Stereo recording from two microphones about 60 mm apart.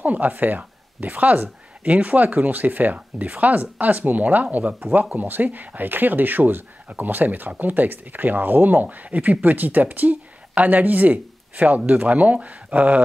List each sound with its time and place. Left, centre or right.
0.0 s speech: right